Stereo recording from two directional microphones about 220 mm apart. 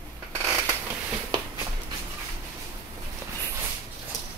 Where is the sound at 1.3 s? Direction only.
20° right (ahead or behind).